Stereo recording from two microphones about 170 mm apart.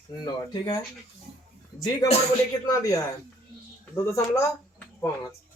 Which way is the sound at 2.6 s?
20° left (ahead or behind).